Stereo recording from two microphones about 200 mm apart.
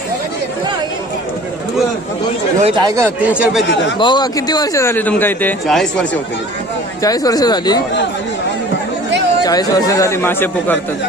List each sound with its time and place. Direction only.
2.6 s speech: 30° right (ahead or behind)
2.8 s speech: 15° right (ahead or behind)
3.9 s speech: 25° left (ahead or behind); by 6.1 s 5° left (ahead or behind)
7.0 s speech: 20° left (ahead or behind)
9.4 s speech: 20° left (ahead or behind)